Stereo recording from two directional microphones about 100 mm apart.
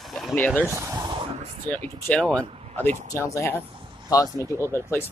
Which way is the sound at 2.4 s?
85° right.